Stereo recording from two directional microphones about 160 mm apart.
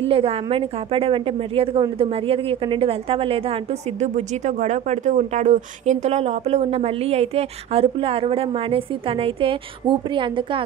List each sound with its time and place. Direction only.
0.1 s a woman's voice: 35° right (ahead or behind)